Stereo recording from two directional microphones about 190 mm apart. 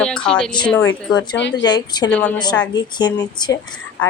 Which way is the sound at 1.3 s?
70° left (ahead or behind).